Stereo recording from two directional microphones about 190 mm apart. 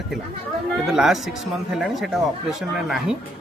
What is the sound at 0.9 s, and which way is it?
Speech, centre (ahead or behind).